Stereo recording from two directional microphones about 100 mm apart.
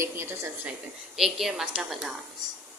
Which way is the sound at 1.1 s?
5° right (ahead or behind).